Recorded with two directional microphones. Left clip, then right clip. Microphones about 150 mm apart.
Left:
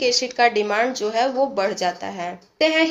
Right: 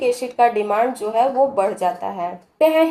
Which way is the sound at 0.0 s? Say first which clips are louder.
Right 1 dB; 25° left (ahead or behind).